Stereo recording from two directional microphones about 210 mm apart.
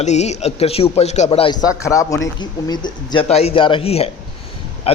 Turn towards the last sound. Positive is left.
turn(degrees=30)  # may be behind; listen again after turning